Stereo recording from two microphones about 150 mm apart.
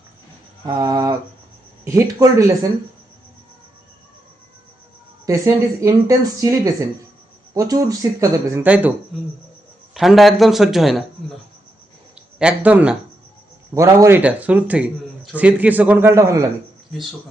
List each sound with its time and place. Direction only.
0.6 s speech: 25° right (ahead or behind)
5.2 s speech: 20° right (ahead or behind)
8.6 s a man's voice: 10° right (ahead or behind)
9.9 s a man's voice: centre (ahead or behind)
12.4 s a man's voice: 10° right (ahead or behind)
13.7 s speech: 20° right (ahead or behind)
14.2 s a man's voice: 10° right (ahead or behind)